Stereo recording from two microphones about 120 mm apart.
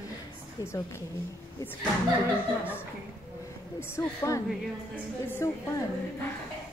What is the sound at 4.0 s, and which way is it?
A woman's voice, 25° left (ahead or behind).